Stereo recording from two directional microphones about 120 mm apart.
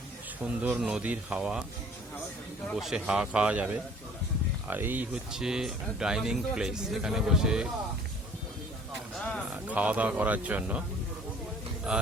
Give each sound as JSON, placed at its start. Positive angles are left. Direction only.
{"t": 0.4, "sound": "speech", "side_deg": -10}
{"t": 2.7, "sound": "speech", "side_deg": -5}
{"t": 5.3, "sound": "speech", "side_deg": -5}
{"t": 9.1, "sound": "a sound", "side_deg": 5}
{"t": 9.5, "sound": "speech", "side_deg": -10}
{"t": 11.9, "sound": "speech", "side_deg": -5}